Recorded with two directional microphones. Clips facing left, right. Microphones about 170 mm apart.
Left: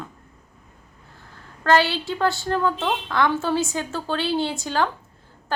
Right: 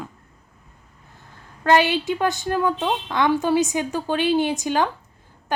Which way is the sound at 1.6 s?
20° right (ahead or behind).